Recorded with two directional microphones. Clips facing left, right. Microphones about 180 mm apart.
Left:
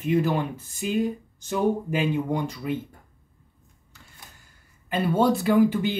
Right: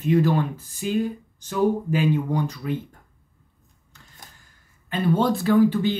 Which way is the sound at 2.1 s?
15° left (ahead or behind).